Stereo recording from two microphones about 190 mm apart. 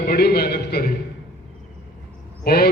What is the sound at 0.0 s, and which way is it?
Speech, 55° left (ahead or behind).